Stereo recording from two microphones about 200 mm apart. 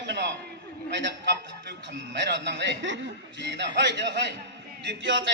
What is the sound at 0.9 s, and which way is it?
A man's voice, 60° right (ahead or behind).